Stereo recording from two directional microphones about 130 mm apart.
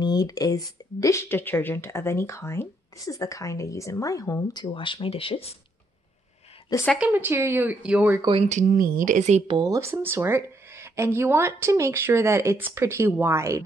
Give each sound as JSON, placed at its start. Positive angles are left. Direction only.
{"t": 0.0, "sound": "speech", "side_deg": 30}
{"t": 4.7, "sound": "speech", "side_deg": 40}
{"t": 7.0, "sound": "a woman's voice", "side_deg": -15}
{"t": 8.2, "sound": "speech", "side_deg": -40}
{"t": 8.5, "sound": "speech", "side_deg": -75}
{"t": 9.5, "sound": "speech", "side_deg": -30}
{"t": 9.8, "sound": "speech", "side_deg": -20}